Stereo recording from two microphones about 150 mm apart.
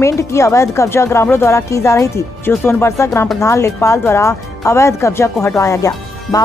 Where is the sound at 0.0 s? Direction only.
20° left (ahead or behind).